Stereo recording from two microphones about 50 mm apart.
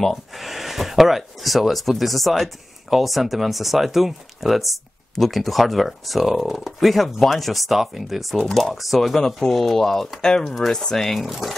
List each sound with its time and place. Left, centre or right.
0.0 s speech: centre